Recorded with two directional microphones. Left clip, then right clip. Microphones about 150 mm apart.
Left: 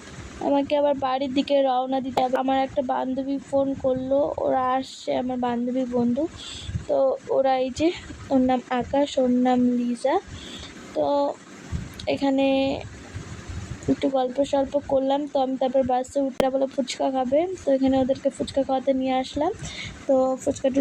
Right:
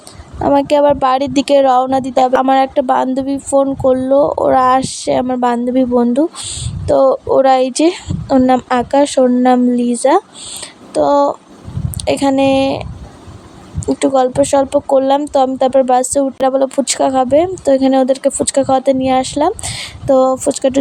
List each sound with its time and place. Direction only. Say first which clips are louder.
0.4 s speech: right 11 dB; 50° right (ahead or behind)
14.0 s speech: right 12 dB; 55° right (ahead or behind)